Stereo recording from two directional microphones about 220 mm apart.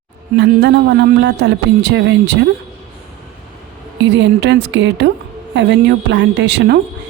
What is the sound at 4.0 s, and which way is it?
Speech, 55° right (ahead or behind).